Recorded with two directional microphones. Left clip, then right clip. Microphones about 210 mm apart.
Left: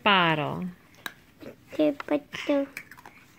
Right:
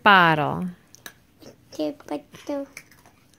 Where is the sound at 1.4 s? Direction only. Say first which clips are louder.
Left 4 dB; 15° left (ahead or behind).